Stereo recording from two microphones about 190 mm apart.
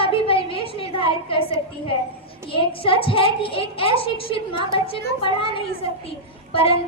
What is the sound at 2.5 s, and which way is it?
A woman's voice, 30° left (ahead or behind).